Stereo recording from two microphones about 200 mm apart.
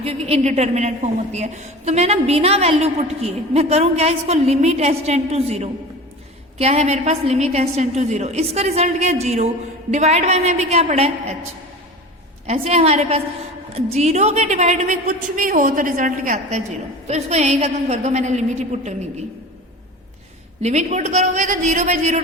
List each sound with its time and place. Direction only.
0.0 s a woman's voice: 30° right (ahead or behind)
12.5 s a woman's voice: 30° right (ahead or behind)
20.6 s a woman's voice: 35° right (ahead or behind)